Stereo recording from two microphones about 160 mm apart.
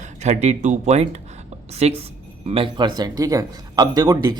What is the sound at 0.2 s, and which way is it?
A man's voice, 45° right (ahead or behind).